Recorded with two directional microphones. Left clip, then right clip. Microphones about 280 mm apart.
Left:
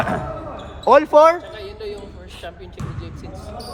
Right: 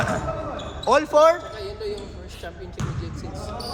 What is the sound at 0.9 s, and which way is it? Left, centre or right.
Speech, left.